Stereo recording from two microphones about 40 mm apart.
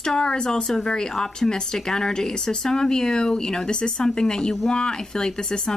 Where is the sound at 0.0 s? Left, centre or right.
Centre.